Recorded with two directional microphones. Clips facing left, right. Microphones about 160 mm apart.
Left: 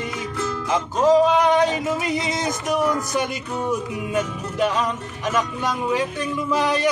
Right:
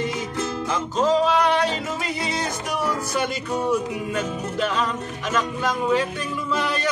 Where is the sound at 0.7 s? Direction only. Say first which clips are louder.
Left 4 dB; 15° left (ahead or behind).